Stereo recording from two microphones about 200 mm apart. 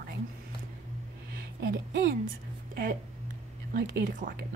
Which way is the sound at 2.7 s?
50° right (ahead or behind).